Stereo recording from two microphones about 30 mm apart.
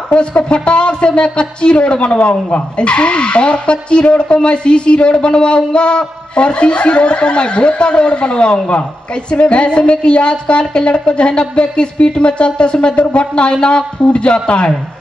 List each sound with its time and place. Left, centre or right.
0.2 s speech: left